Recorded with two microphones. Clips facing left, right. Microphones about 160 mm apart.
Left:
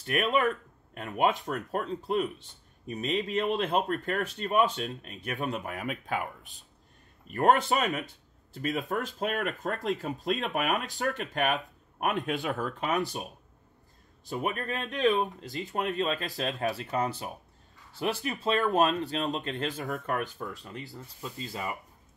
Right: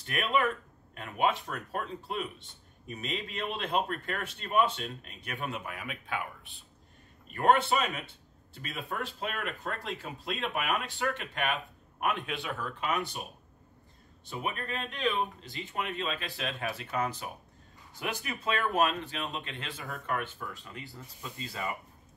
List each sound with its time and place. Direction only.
0.9 s a man's voice: 45° left (ahead or behind)
14.3 s speech: 40° left (ahead or behind)